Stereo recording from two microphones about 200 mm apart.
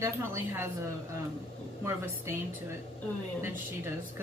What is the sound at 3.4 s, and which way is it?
Speech, 10° right (ahead or behind).